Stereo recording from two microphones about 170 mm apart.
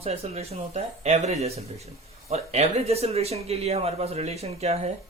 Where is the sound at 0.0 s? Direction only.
35° right (ahead or behind).